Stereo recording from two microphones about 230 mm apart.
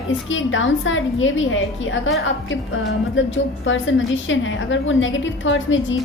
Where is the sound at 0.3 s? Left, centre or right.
Left.